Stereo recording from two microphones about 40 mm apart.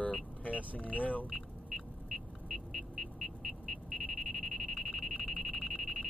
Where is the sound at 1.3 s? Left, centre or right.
Centre.